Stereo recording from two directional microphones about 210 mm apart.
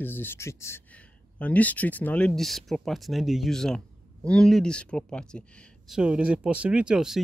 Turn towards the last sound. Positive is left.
turn(degrees=-5)  # may be behind; listen again after turning